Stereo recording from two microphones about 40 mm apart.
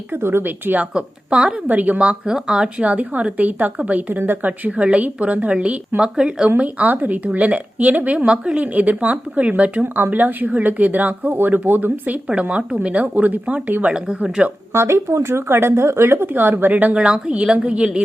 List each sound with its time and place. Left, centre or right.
0.2 s a woman's voice: right
0.4 s speech: right
0.8 s a woman's voice: right
1.6 s speech: right
2.0 s a woman's voice: right
2.8 s speech: right
6.1 s speech: centre
6.6 s speech: right
9.8 s a woman's voice: right
10.1 s speech: right
12.3 s speech: right
14.7 s a woman's voice: right
16.3 s a woman's voice: right
16.9 s a woman's voice: right